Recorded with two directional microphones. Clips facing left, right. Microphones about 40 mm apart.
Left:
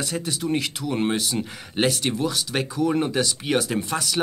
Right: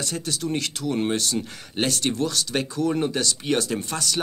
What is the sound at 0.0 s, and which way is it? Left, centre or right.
Speech, centre.